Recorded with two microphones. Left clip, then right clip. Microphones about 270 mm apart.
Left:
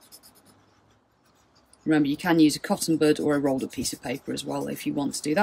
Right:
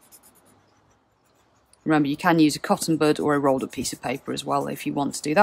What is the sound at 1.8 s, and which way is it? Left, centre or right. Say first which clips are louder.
Speech: right 2 dB; centre.